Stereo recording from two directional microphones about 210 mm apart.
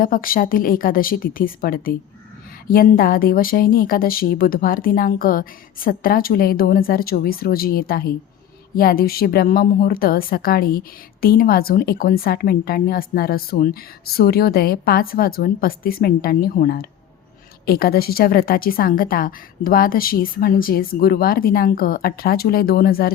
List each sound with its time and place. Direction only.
0.0 s a woman's voice: 40° left (ahead or behind)